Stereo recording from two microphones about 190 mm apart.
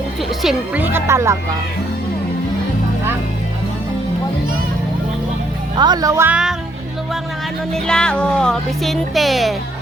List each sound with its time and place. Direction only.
0.4 s speech: 10° right (ahead or behind)
5.7 s speech: 20° right (ahead or behind); by 6.6 s 5° right (ahead or behind)
7.7 s speech: 5° left (ahead or behind)